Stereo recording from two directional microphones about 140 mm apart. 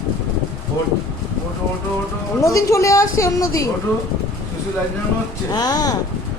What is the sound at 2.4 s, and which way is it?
A woman's voice, 25° left (ahead or behind).